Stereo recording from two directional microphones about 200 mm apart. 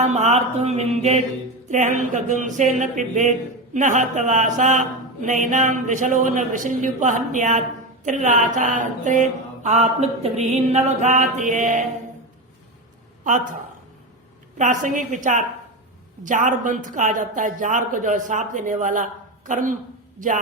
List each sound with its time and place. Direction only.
0.0 s mantra: 35° right (ahead or behind)
13.2 s speech: 40° right (ahead or behind)
14.6 s mantra: 40° right (ahead or behind)
20.1 s a woman's voice: 40° right (ahead or behind)